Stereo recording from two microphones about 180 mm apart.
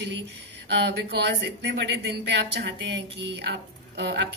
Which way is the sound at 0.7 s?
70° right (ahead or behind).